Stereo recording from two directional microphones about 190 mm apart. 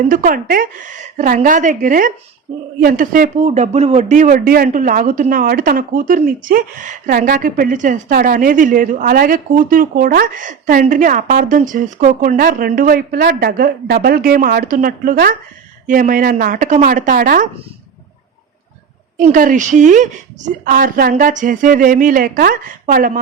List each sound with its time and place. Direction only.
0.1 s a woman's voice: 50° right (ahead or behind)
19.1 s a woman's voice: 45° right (ahead or behind)